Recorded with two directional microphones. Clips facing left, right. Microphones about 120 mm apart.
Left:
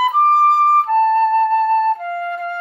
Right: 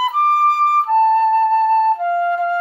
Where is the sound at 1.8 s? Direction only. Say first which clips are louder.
Right 4 dB; 30° right (ahead or behind).